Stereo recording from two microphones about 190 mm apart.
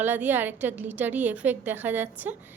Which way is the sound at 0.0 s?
10° right (ahead or behind).